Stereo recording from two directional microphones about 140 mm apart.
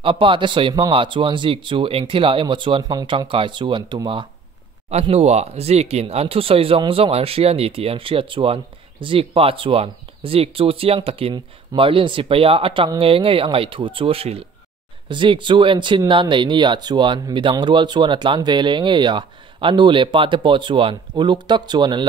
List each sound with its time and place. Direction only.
0.0 s speech: 40° right (ahead or behind)
5.0 s speech: 50° right (ahead or behind); by 22.0 s 30° right (ahead or behind)